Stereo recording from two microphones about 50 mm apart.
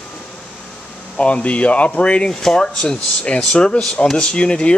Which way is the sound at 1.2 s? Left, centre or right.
Left.